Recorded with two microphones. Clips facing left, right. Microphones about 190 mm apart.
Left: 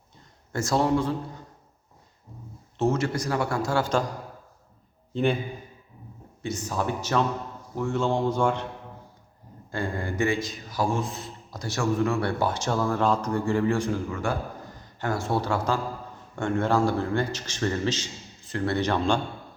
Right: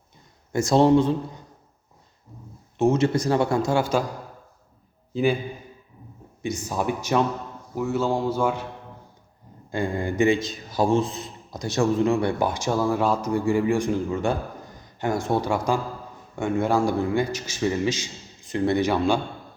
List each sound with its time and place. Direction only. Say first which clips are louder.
0.5 s speech: right 6 dB; 20° right (ahead or behind)
2.7 s speech: right 5 dB; 15° right (ahead or behind)
5.1 s speech: right 2 dB; 5° right (ahead or behind)
6.4 s a man's voice: right 2 dB; 10° right (ahead or behind)
9.7 s a man's voice: right 5 dB; 15° right (ahead or behind)